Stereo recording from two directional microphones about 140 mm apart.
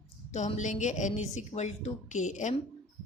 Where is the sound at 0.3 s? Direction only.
55° left (ahead or behind).